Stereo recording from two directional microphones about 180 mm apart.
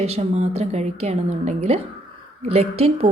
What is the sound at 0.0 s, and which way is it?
A woman's voice, 35° right (ahead or behind).